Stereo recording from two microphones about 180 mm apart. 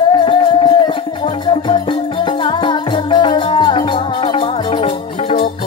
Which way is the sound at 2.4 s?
30° left (ahead or behind).